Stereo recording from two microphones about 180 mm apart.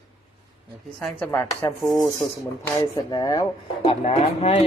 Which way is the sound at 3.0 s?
20° left (ahead or behind).